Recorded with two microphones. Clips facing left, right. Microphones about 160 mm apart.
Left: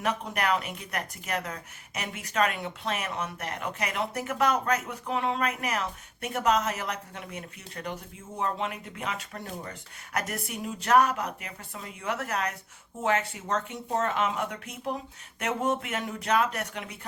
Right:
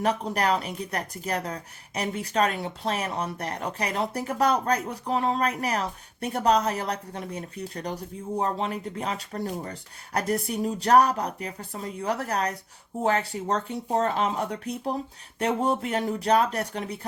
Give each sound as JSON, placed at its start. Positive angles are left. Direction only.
{"t": 0.0, "sound": "speech", "side_deg": -35}